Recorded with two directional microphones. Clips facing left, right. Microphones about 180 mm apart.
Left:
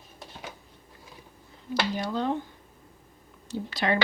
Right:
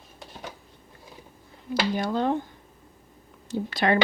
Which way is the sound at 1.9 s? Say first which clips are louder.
Right 5 dB; 50° right (ahead or behind).